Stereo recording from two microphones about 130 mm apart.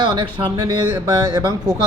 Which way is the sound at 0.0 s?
35° right (ahead or behind).